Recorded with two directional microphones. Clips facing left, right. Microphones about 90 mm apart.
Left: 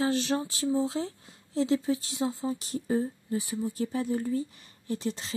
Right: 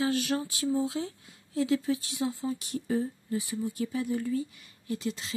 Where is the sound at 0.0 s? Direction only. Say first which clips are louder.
Left 1 dB; 30° left (ahead or behind).